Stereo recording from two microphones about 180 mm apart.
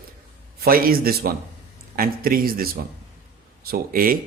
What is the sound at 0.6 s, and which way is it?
A man's voice, 55° right (ahead or behind).